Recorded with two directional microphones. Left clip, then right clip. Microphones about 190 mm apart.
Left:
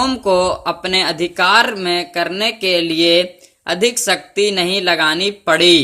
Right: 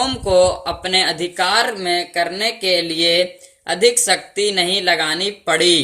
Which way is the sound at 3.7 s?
40° left (ahead or behind).